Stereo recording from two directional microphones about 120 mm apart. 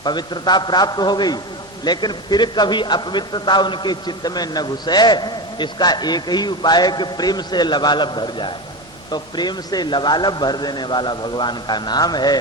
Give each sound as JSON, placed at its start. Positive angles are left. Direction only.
{"t": 0.0, "sound": "a man's voice", "side_deg": 35}